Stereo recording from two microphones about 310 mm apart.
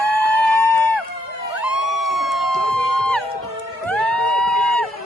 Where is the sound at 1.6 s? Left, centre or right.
Left.